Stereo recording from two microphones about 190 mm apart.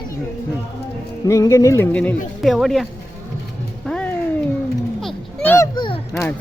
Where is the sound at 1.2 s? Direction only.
15° left (ahead or behind); by 2.8 s centre (ahead or behind).